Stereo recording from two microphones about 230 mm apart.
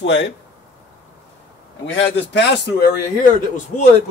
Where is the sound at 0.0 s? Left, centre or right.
Left.